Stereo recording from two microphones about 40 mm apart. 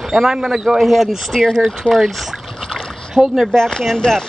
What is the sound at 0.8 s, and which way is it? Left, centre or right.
Speech, centre.